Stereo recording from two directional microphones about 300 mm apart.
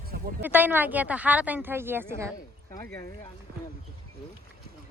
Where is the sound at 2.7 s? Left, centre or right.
Centre.